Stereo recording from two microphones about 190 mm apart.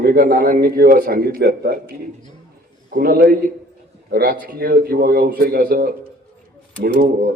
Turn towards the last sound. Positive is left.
turn(degrees=-55)  # may be behind; listen again after turning